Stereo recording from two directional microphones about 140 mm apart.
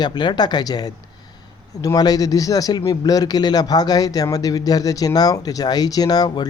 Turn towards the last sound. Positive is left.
turn(degrees=30)  # may be behind; listen again after turning